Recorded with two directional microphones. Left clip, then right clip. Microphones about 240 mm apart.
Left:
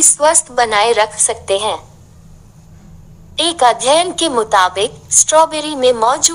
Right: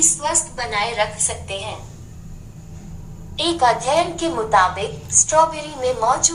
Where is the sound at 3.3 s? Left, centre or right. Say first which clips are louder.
Left 5 dB; left.